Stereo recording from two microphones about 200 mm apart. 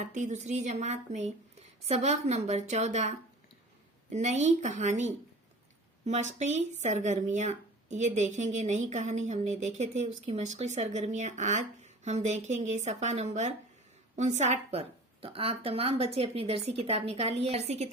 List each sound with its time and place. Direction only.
0.0 s speech: 35° right (ahead or behind)